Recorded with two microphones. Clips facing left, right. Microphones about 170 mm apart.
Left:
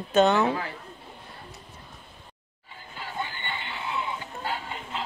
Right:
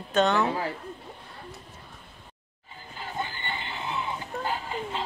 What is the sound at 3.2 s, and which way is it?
Music, 35° right (ahead or behind).